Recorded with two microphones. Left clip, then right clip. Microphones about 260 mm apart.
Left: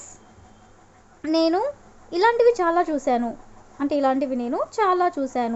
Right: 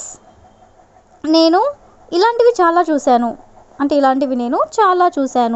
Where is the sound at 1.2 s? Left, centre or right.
Right.